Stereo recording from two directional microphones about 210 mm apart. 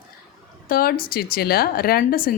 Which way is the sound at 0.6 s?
45° left (ahead or behind).